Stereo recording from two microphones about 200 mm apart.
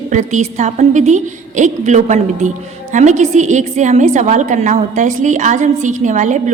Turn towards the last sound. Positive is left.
turn(degrees=-40)  # may be behind; listen again after turning